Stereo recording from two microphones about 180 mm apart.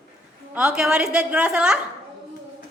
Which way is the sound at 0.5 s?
5° right (ahead or behind).